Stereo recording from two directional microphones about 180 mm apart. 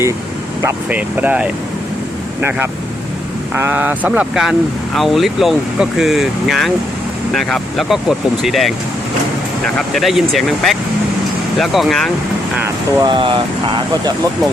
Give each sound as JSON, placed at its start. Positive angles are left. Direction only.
{"t": 0.6, "sound": "speech", "side_deg": -10}
{"t": 9.7, "sound": "speech", "side_deg": 0}
{"t": 12.5, "sound": "speech", "side_deg": -15}
{"t": 13.1, "sound": "speech", "side_deg": -25}